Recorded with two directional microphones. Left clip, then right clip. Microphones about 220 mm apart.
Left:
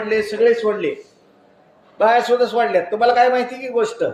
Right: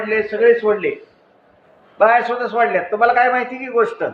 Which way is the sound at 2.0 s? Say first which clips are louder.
Even; 45° left (ahead or behind).